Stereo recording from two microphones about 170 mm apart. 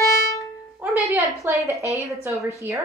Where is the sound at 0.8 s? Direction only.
15° right (ahead or behind).